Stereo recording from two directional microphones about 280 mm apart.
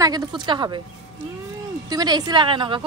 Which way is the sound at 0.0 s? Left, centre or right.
Centre.